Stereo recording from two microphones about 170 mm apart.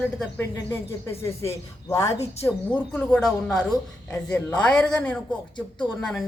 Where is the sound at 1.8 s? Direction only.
20° left (ahead or behind).